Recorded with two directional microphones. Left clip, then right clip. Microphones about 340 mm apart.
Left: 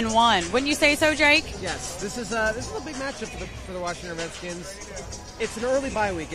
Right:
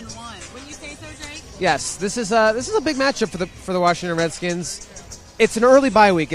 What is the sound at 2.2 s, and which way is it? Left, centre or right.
Speech, right.